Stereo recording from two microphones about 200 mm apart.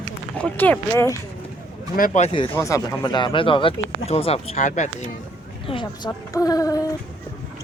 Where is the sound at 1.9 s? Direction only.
40° left (ahead or behind).